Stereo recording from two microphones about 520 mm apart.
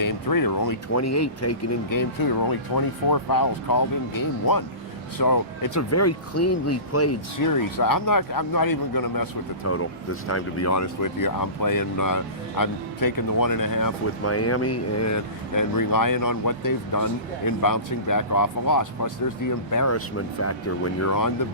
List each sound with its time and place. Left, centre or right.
0.0 s speech: left
9.6 s speech: left